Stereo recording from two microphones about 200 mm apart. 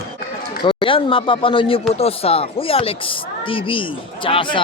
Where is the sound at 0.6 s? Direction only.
25° left (ahead or behind).